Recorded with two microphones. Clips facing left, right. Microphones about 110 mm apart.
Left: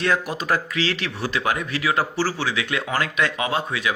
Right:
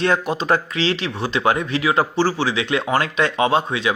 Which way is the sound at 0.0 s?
25° right (ahead or behind).